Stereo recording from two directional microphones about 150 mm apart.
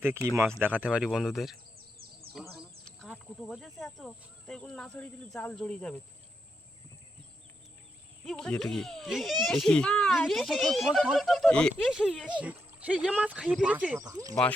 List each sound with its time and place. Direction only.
0.6 s a child's voice: 10° right (ahead or behind)
2.3 s bird: centre (ahead or behind)
3.0 s a child's voice: centre (ahead or behind)
8.2 s a child's voice: 5° left (ahead or behind)
11.7 s speech: 5° right (ahead or behind)
14.0 s speech: 25° right (ahead or behind)